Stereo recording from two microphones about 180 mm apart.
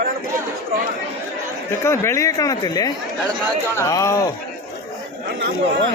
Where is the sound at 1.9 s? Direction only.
15° left (ahead or behind).